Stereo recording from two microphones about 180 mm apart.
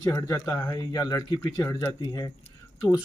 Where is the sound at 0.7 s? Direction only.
20° left (ahead or behind).